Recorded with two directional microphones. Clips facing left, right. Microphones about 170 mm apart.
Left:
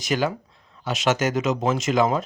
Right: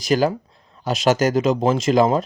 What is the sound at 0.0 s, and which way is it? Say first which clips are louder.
Speech: right 5 dB; 35° right (ahead or behind).